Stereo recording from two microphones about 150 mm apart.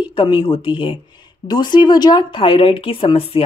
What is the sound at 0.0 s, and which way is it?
A woman's voice, 35° left (ahead or behind).